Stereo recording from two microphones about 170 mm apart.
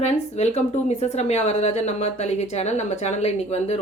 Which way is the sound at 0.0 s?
40° left (ahead or behind).